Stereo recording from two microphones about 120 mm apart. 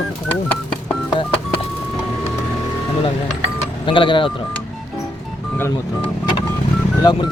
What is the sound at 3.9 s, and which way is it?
Speech, 45° left (ahead or behind).